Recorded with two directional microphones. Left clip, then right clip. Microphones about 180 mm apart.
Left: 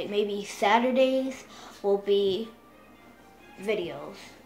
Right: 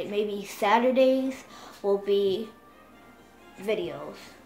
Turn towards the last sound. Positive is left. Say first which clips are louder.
# right 1 dB
turn(degrees=0)  # may be behind; listen again after turning